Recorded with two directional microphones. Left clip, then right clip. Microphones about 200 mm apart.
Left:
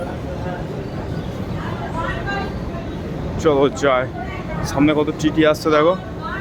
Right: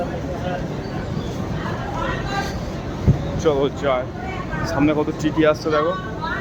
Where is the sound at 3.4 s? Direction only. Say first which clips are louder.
Left 4 dB; 20° left (ahead or behind).